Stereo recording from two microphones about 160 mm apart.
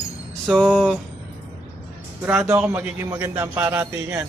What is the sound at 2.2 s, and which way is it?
A man's voice, 10° right (ahead or behind).